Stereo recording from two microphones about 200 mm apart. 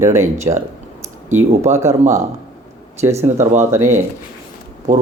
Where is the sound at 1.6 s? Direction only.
15° right (ahead or behind).